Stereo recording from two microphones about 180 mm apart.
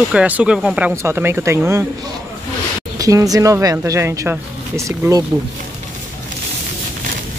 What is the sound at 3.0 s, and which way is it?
Speech, 20° right (ahead or behind).